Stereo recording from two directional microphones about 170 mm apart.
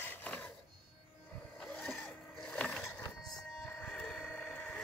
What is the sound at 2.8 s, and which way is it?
Wood, 20° left (ahead or behind).